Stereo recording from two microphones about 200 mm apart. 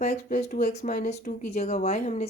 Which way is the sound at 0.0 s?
35° left (ahead or behind).